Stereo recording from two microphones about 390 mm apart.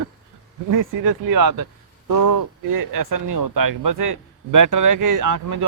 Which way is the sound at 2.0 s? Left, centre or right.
Right.